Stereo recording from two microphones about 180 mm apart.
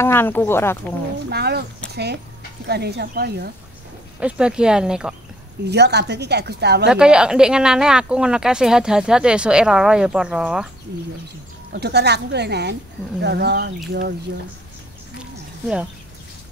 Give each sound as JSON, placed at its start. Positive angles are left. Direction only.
{"t": 0.0, "sound": "speech", "side_deg": 10}
{"t": 1.3, "sound": "speech", "side_deg": -60}
{"t": 4.2, "sound": "speech", "side_deg": -5}
{"t": 5.7, "sound": "a woman's voice", "side_deg": -65}
{"t": 6.9, "sound": "speech", "side_deg": -5}
{"t": 11.7, "sound": "a woman's voice", "side_deg": -65}